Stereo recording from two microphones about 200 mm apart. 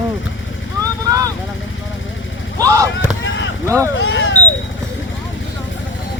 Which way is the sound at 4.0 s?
65° left (ahead or behind).